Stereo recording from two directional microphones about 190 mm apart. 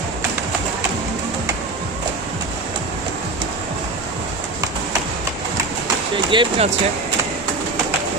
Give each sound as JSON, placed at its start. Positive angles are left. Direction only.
{"t": 6.3, "sound": "speech", "side_deg": -25}